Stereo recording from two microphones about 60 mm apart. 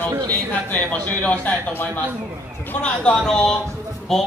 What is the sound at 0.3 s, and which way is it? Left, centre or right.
A man's voice, left.